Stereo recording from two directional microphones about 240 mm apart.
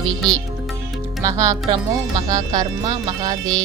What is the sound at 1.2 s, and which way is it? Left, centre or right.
Speech, centre.